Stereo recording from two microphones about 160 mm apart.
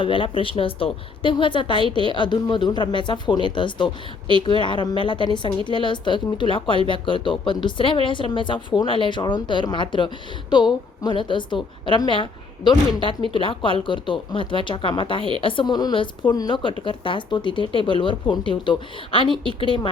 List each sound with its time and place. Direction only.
0.0 s speech: 30° left (ahead or behind)